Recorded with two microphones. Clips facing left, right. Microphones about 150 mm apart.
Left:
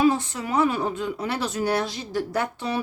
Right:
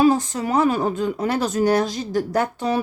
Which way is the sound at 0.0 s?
40° right (ahead or behind).